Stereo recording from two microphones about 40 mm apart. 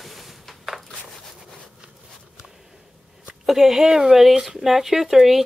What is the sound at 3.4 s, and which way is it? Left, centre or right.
Speech, centre.